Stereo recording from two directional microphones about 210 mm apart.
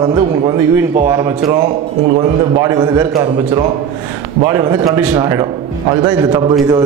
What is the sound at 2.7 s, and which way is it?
Speech, 20° right (ahead or behind).